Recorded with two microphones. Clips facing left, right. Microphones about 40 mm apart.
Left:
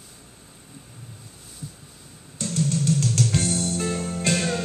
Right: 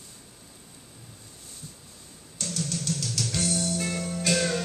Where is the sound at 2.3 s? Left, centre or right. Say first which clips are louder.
Left 7 dB; left.